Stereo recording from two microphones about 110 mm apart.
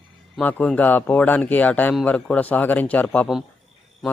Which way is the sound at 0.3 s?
10° left (ahead or behind).